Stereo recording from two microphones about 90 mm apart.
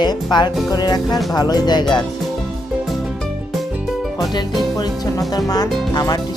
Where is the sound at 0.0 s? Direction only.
55° left (ahead or behind).